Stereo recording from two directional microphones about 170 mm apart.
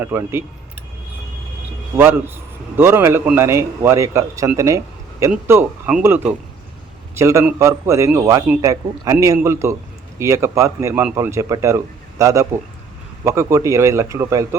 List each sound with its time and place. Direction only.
0.0 s speech: 15° right (ahead or behind)
2.0 s speech: 15° right (ahead or behind)